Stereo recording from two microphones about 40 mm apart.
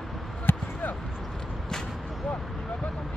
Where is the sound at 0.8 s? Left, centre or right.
Left.